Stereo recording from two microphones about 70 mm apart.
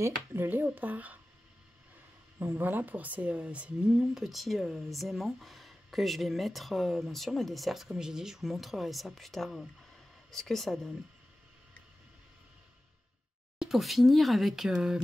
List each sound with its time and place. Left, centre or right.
0.0 s speech: right
2.3 s a woman's voice: right; by 11.0 s centre
13.6 s a woman's voice: centre